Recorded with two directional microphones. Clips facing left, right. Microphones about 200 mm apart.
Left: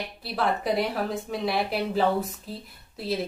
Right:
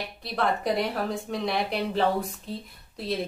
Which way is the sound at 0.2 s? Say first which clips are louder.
Even; centre (ahead or behind).